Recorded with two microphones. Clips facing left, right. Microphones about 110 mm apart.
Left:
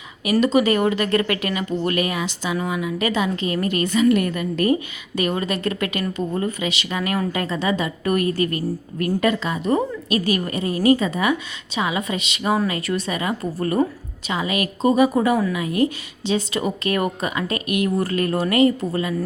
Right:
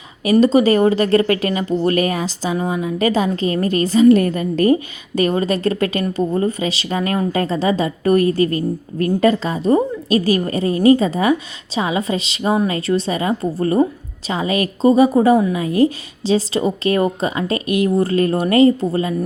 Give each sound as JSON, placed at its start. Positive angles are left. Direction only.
{"t": 0.3, "sound": "speech", "side_deg": -35}